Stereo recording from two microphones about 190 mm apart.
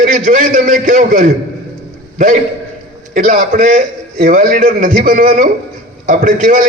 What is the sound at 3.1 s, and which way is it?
A man's voice, 45° right (ahead or behind).